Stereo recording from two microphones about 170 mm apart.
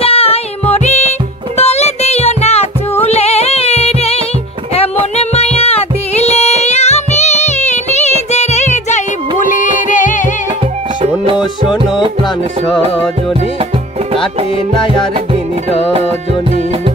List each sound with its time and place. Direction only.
0.0 s music: 35° left (ahead or behind)
12.6 s music: 5° left (ahead or behind)